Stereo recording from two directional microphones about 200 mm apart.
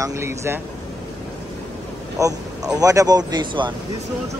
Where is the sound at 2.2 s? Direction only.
15° right (ahead or behind).